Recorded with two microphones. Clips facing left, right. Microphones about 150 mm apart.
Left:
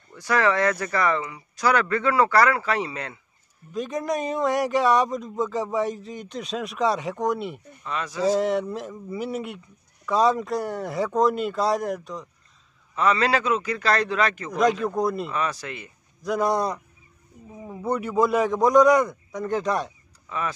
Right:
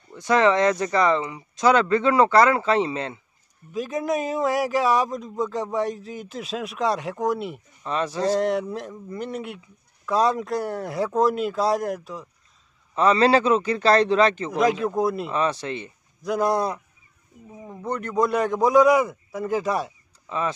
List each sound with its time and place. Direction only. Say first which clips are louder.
0.1 s speech: right 3 dB; 20° right (ahead or behind)
3.7 s a man's voice: right 1 dB; centre (ahead or behind)
7.8 s speech: right 5 dB; 30° right (ahead or behind)
8.2 s a man's voice: left 1 dB; centre (ahead or behind)
12.9 s speech: right 4 dB; 30° right (ahead or behind)
14.5 s a man's voice: even; 5° right (ahead or behind)
15.3 s speech: right 4 dB; 25° right (ahead or behind)
16.2 s a man's voice: right 1 dB; centre (ahead or behind)
20.2 s speech: right 3 dB; 25° right (ahead or behind)